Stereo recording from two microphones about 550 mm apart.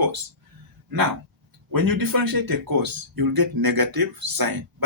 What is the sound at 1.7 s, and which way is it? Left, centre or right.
Speech, right.